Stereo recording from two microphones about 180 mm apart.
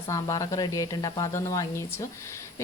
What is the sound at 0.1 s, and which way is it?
A woman's voice, 20° left (ahead or behind).